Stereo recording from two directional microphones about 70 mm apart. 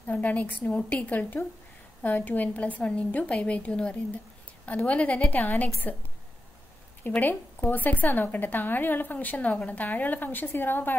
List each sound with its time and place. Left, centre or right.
0.0 s a woman's voice: left
7.0 s a woman's voice: left